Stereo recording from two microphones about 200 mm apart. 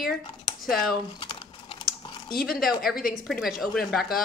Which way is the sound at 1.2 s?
25° left (ahead or behind).